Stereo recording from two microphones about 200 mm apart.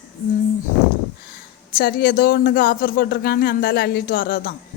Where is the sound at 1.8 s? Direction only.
50° left (ahead or behind).